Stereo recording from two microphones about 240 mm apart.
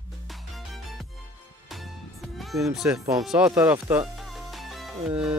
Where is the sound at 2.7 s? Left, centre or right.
Centre.